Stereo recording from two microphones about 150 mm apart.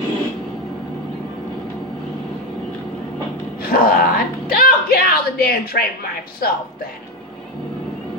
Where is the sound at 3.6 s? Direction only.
80° left.